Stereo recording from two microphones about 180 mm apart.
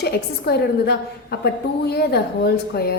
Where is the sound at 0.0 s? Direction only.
65° left (ahead or behind).